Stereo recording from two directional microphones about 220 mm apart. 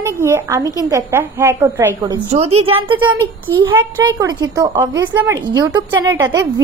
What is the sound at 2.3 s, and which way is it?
Speech, 30° right (ahead or behind).